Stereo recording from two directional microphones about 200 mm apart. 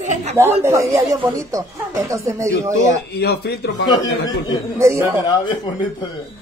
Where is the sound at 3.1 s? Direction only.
55° left (ahead or behind).